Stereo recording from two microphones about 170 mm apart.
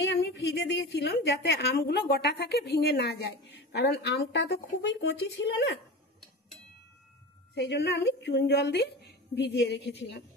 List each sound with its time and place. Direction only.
0.2 s a woman's voice: 80° left
7.5 s a woman's voice: 75° left (ahead or behind)